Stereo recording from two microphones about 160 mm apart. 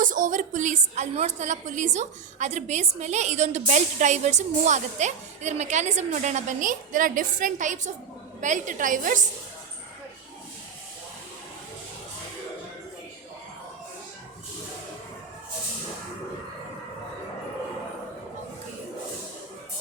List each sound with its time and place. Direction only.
0.0 s a woman's voice: 55° right (ahead or behind)